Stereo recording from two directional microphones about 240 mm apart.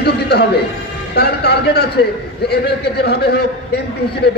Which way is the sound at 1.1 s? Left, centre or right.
Left.